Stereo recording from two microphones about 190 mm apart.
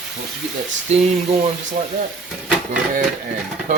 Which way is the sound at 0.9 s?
35° right (ahead or behind).